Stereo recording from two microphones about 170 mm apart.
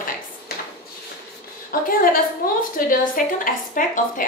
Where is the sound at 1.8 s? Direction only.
55° left (ahead or behind).